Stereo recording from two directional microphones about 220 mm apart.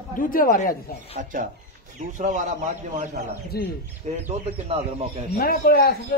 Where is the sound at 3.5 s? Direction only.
45° left (ahead or behind).